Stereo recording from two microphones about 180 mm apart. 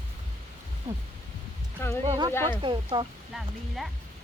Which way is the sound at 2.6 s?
25° right (ahead or behind).